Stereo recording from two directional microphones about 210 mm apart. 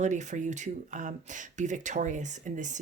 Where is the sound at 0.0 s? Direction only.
35° right (ahead or behind).